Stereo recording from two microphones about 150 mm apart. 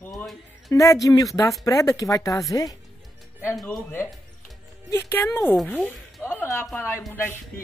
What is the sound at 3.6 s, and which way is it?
Speech, centre (ahead or behind).